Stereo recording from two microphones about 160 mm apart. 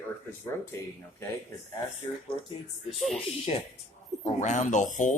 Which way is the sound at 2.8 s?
Centre (ahead or behind).